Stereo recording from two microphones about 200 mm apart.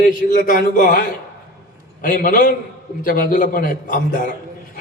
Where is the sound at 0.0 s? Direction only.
40° left (ahead or behind).